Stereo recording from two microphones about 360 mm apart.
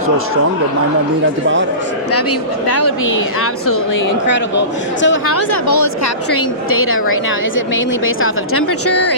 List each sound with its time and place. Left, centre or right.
2.6 s speech: left
5.0 s speech: left
6.7 s speech: left